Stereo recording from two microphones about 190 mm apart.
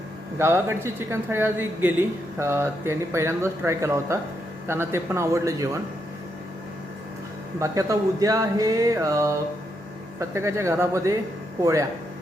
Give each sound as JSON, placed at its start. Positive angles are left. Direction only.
{"t": 0.3, "sound": "speech", "side_deg": -15}
{"t": 7.6, "sound": "speech", "side_deg": -15}